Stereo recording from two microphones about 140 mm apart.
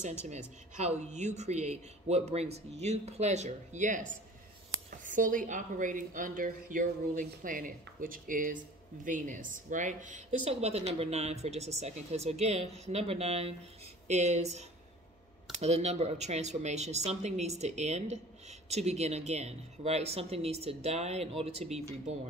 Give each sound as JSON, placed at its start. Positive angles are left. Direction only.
{"t": 0.7, "sound": "a woman's voice", "side_deg": -55}
{"t": 9.0, "sound": "speech", "side_deg": -65}